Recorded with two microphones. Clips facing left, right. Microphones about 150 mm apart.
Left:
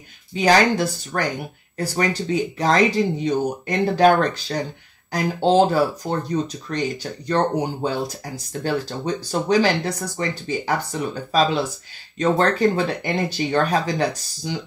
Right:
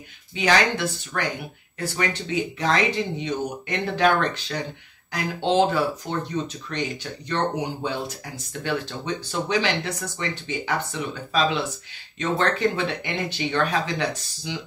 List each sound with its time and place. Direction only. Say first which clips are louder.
0.3 s speech: left 5 dB; 40° left (ahead or behind)